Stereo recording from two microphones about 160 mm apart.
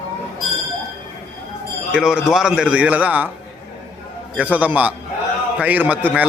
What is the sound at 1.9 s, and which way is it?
Speech, 5° right (ahead or behind).